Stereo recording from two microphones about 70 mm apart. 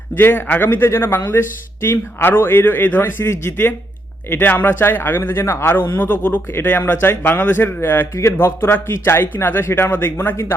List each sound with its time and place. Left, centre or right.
0.2 s speech: left